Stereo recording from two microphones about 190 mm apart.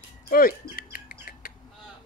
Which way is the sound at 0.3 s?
50° left (ahead or behind).